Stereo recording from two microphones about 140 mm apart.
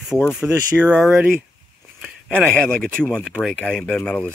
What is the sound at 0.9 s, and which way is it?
Speech, 10° left (ahead or behind).